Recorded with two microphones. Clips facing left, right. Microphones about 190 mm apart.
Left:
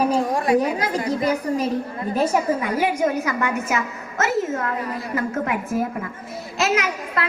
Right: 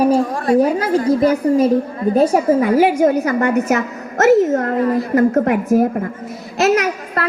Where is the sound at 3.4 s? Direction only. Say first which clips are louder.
Right 8 dB; 65° right (ahead or behind).